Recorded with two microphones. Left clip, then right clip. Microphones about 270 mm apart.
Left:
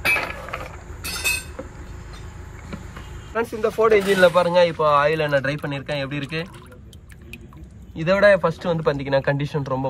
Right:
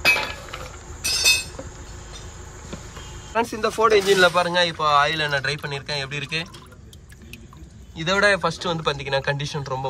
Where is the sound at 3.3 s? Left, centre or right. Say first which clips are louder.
Even; centre.